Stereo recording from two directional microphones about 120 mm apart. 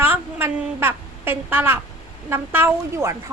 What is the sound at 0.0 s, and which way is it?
A woman's voice, 15° right (ahead or behind).